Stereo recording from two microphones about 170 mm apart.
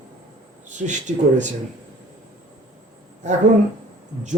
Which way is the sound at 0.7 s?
45° right (ahead or behind).